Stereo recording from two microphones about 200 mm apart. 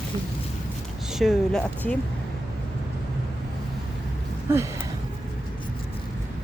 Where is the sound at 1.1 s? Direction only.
Centre (ahead or behind).